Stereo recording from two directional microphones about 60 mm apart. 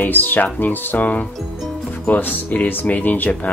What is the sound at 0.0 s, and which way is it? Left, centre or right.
Speech, left.